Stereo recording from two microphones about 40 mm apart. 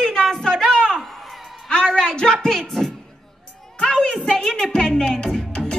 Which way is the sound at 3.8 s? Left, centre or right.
Left.